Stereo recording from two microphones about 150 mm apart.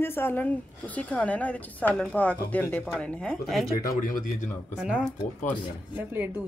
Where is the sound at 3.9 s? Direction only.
70° left (ahead or behind).